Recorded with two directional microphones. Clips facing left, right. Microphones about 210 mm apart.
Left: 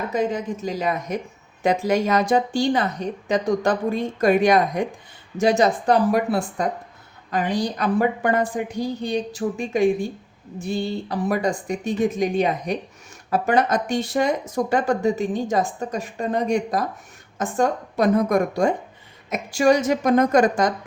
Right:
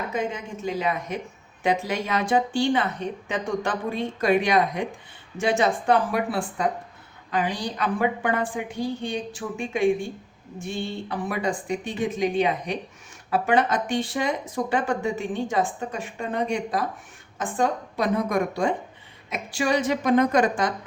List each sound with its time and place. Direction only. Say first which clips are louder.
0.1 s a woman's voice: left 5 dB; 35° left (ahead or behind)